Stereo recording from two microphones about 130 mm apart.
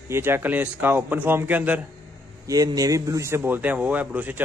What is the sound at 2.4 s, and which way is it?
Speech, 30° right (ahead or behind).